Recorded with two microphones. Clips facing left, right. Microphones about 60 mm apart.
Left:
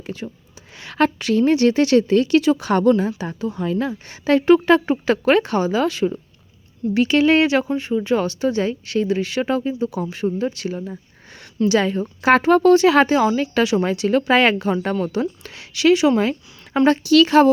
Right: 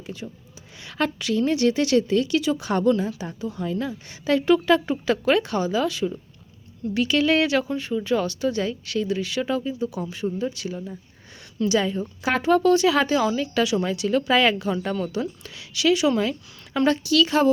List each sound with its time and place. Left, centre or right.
0.2 s speech: left
0.8 s a woman's voice: left
6.9 s speech: left
11.7 s a woman's voice: left